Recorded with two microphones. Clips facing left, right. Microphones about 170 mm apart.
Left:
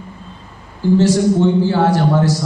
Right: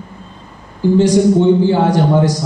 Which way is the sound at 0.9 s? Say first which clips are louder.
Right 3 dB; 15° right (ahead or behind).